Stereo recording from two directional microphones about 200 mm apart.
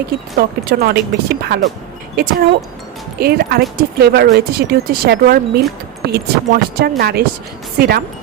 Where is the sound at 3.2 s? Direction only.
50° right (ahead or behind).